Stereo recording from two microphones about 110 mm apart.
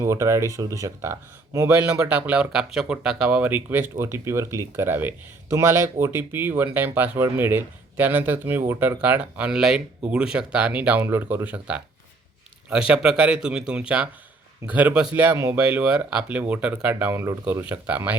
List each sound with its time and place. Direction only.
0.0 s speech: 30° right (ahead or behind)